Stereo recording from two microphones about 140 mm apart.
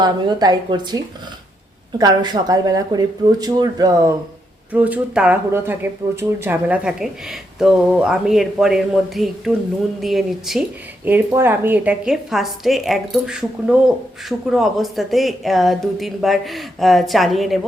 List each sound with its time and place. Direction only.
0.0 s a woman's voice: 30° right (ahead or behind)
2.0 s speech: 30° right (ahead or behind)
4.7 s a woman's voice: 10° right (ahead or behind)
11.0 s a woman's voice: 15° right (ahead or behind)